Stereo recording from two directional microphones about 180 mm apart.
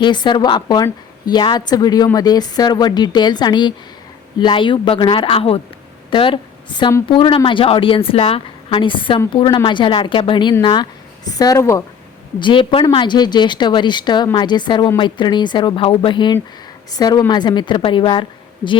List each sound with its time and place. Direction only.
0.0 s a woman's voice: 25° left (ahead or behind)
12.4 s a woman's voice: 25° left (ahead or behind)